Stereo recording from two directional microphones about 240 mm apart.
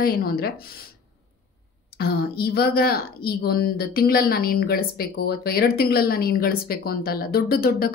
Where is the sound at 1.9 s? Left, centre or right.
Left.